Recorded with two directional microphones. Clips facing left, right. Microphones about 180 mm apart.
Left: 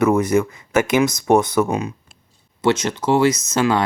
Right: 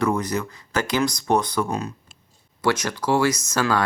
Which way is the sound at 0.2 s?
25° left (ahead or behind).